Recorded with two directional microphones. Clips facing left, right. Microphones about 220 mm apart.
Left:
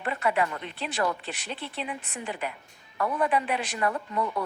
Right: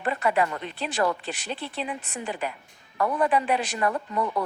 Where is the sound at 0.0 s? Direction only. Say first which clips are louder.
Right 3 dB; 40° right (ahead or behind).